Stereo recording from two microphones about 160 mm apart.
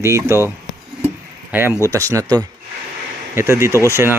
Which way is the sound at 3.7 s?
15° left (ahead or behind).